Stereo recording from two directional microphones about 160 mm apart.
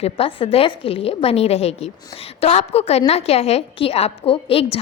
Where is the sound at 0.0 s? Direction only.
35° left (ahead or behind).